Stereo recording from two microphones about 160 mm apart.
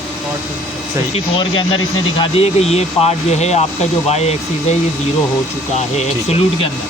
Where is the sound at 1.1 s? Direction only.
30° left (ahead or behind).